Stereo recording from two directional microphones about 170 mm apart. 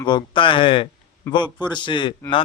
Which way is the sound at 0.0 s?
25° left (ahead or behind).